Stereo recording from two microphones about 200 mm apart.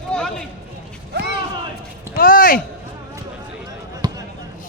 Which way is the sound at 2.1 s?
45° left (ahead or behind).